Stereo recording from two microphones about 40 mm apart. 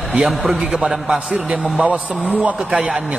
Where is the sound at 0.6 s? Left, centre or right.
Right.